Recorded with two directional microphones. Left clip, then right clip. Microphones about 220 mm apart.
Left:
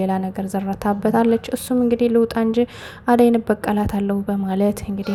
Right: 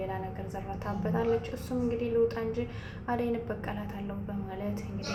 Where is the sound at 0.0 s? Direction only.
45° left (ahead or behind).